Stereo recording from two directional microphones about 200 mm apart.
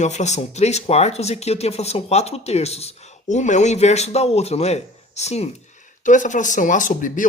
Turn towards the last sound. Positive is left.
turn(degrees=40)  # may be behind; listen again after turning